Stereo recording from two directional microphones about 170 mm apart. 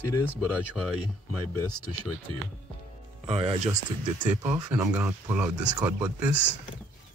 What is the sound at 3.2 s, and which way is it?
Speech, 35° right (ahead or behind).